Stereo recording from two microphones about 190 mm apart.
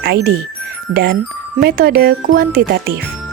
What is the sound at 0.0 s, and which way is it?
Speech, 55° right (ahead or behind).